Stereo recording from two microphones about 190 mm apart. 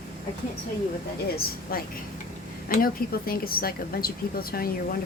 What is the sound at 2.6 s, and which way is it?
A woman's voice, 50° left (ahead or behind).